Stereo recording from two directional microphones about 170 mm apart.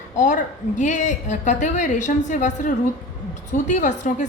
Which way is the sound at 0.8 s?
45° left (ahead or behind).